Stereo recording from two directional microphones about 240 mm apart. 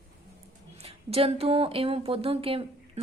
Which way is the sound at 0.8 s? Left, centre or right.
Right.